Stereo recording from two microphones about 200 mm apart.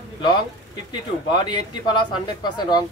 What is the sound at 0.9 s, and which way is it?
Speech, 20° left (ahead or behind).